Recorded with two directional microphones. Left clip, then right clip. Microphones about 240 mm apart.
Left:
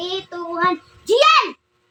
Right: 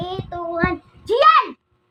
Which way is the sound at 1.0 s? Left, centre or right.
Left.